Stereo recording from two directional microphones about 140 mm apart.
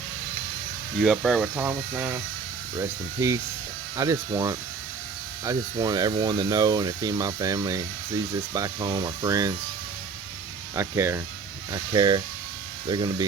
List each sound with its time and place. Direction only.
1.0 s speech: centre (ahead or behind)
1.6 s speech: 15° right (ahead or behind)
3.2 s speech: 20° right (ahead or behind)
5.7 s speech: 30° right (ahead or behind)
10.8 s speech: 20° right (ahead or behind)
11.7 s speech: 30° right (ahead or behind)